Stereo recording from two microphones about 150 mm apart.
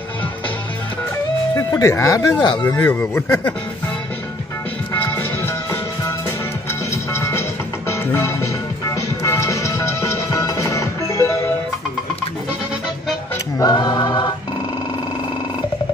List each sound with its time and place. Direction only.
1.6 s speech: 20° left (ahead or behind)
4.9 s music: 15° left (ahead or behind)
13.6 s music: 25° left (ahead or behind)